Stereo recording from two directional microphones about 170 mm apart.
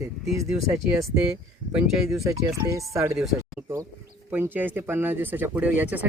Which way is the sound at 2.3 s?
20° right (ahead or behind).